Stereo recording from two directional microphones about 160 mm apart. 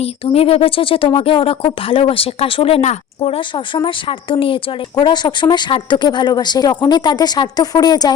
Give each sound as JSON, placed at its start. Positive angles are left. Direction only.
{"t": 0.0, "sound": "speech", "side_deg": 35}